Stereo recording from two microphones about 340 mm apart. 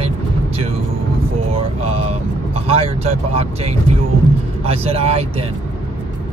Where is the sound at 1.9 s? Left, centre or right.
Centre.